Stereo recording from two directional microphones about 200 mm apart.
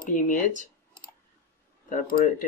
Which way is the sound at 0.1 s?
40° left (ahead or behind).